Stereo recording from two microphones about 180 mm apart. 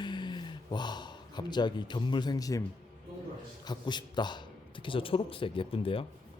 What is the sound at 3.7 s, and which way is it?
A man's voice, 25° left (ahead or behind).